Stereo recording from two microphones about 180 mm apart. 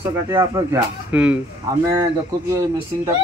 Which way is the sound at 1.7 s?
20° right (ahead or behind).